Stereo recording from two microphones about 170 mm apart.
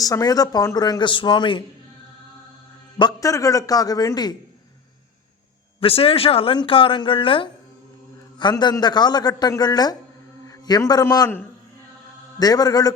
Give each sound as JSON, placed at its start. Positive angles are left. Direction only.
{"t": 0.0, "sound": "a man's voice", "side_deg": 20}
{"t": 3.0, "sound": "a man's voice", "side_deg": 20}
{"t": 5.8, "sound": "a man's voice", "side_deg": 35}